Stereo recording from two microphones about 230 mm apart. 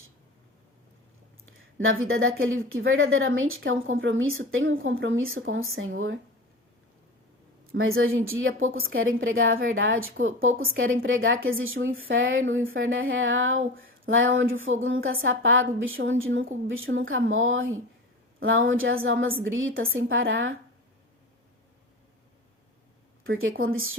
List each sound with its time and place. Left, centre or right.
1.8 s speech: right
7.7 s speech: right
23.4 s speech: right